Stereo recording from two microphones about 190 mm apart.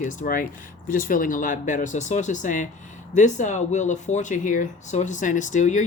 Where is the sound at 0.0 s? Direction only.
40° left (ahead or behind).